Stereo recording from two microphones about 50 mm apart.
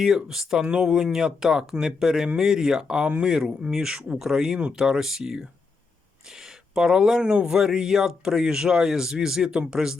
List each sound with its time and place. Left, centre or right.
0.3 s speech: centre
4.5 s speech: right
4.8 s speech: centre
6.7 s speech: centre